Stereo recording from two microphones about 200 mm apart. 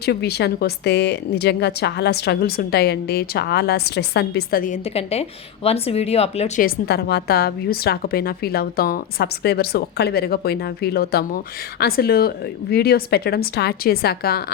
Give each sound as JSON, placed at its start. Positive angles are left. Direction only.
{"t": 0.0, "sound": "speech", "side_deg": 55}
{"t": 5.6, "sound": "speech", "side_deg": 30}
{"t": 6.6, "sound": "a woman's voice", "side_deg": 50}